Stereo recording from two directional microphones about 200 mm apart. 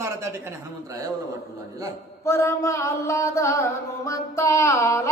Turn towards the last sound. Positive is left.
turn(degrees=15)  # may be behind; listen again after turning